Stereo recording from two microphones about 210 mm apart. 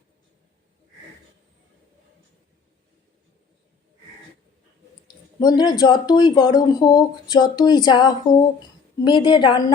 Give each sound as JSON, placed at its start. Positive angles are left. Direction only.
{"t": 5.0, "sound": "speech", "side_deg": 20}